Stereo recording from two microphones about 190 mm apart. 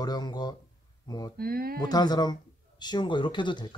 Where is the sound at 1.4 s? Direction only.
55° right (ahead or behind).